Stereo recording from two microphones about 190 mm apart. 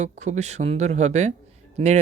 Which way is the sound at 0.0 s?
35° right (ahead or behind).